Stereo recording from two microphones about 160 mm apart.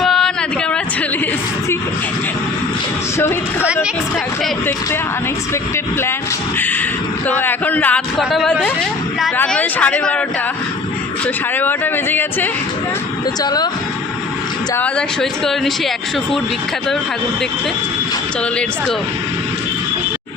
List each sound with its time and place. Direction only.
0.0 s a sound: 5° left (ahead or behind)
3.2 s speech: 15° left (ahead or behind)
5.7 s speech: 15° left (ahead or behind)
8.2 s speech: centre (ahead or behind)
11.5 s speech: 10° left (ahead or behind)
13.4 s speech: 25° left (ahead or behind)
14.8 s speech: 5° left (ahead or behind)